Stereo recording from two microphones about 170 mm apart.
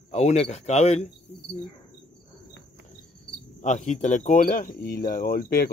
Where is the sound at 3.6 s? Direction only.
45° left (ahead or behind).